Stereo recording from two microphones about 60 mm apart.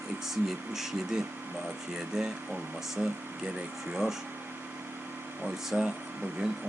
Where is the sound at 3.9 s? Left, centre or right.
Centre.